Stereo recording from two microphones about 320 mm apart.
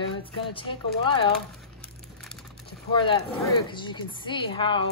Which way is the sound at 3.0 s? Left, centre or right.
Centre.